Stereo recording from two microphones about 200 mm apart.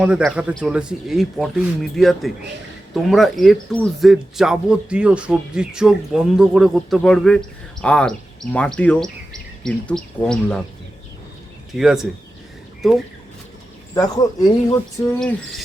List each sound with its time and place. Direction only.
0.0 s a man's voice: 5° right (ahead or behind)
11.7 s a man's voice: centre (ahead or behind)
13.9 s speech: 15° left (ahead or behind)
15.2 s a man's voice: 5° left (ahead or behind)